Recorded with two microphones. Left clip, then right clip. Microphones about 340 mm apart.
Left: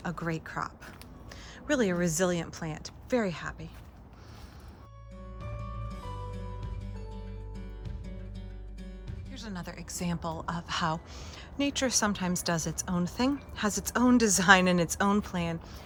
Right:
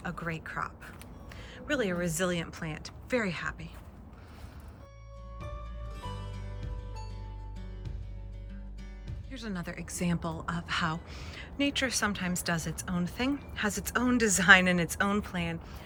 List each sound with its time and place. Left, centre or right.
0.0 s a sound: centre
1.5 s a woman's voice: centre
6.0 s music: centre
9.3 s a woman's voice: centre